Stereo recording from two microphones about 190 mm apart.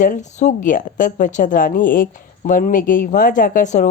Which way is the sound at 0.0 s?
40° left (ahead or behind).